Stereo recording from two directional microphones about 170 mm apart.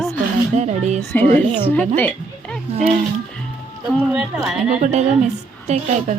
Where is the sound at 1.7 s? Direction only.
10° left (ahead or behind).